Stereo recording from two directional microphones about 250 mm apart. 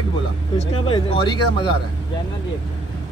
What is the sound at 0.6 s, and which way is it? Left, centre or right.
Speech, left.